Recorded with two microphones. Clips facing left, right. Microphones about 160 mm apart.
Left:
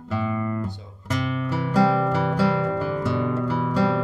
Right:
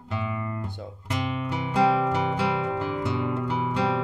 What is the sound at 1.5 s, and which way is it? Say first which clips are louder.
Music: left 2 dB; 20° right (ahead or behind).